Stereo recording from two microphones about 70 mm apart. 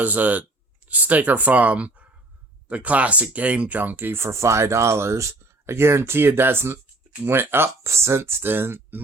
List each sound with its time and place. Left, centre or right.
0.0 s speech: right